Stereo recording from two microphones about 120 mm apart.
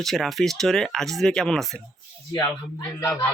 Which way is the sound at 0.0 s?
Centre (ahead or behind).